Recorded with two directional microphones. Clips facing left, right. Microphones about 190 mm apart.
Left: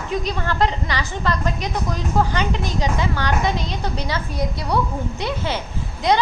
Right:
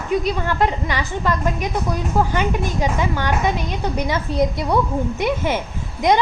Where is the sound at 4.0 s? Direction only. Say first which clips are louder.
Right 9 dB; 20° right (ahead or behind).